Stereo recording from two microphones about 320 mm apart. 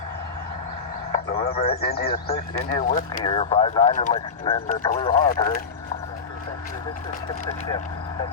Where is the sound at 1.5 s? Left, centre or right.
Centre.